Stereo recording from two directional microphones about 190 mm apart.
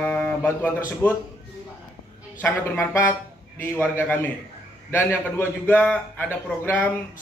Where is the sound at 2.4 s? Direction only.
10° left (ahead or behind).